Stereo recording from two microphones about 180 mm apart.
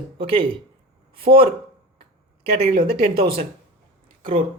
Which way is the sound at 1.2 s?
55° right (ahead or behind).